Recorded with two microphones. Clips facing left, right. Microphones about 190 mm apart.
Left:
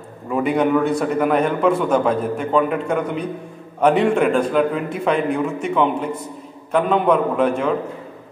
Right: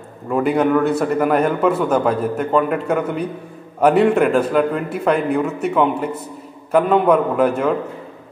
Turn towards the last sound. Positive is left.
turn(degrees=-5)  # may be behind; listen again after turning